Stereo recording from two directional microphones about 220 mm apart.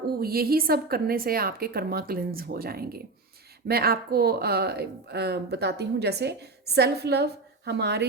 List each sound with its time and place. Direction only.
0.2 s speech: 45° right (ahead or behind)